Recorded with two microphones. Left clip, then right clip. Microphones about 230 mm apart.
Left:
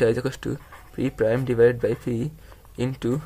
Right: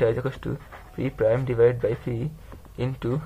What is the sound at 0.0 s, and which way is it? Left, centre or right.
Speech, left.